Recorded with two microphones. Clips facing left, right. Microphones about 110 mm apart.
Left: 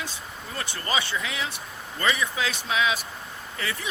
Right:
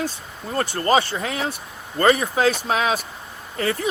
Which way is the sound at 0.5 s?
45° right (ahead or behind).